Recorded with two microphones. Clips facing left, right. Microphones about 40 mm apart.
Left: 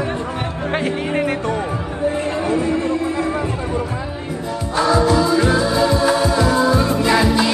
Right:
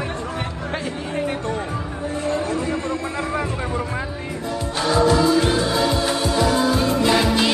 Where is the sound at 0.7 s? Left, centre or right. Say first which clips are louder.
Left 7 dB; left.